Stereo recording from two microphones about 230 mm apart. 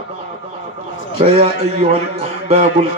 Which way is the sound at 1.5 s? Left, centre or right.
Right.